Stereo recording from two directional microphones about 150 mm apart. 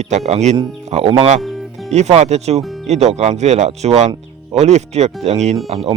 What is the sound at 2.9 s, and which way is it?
Speech, 45° right (ahead or behind).